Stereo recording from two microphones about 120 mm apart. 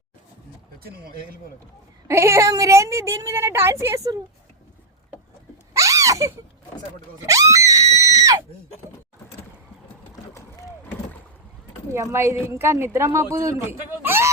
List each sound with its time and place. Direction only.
2.0 s a woman's voice: 20° right (ahead or behind)
5.7 s a sound: 25° right (ahead or behind)
7.3 s screaming: 25° right (ahead or behind)
11.9 s a woman's voice: 20° right (ahead or behind)